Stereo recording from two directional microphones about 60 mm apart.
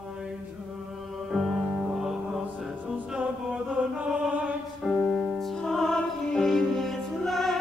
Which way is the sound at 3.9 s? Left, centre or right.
Right.